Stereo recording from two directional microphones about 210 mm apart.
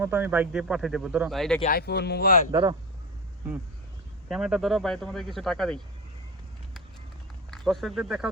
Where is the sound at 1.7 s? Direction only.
50° left (ahead or behind).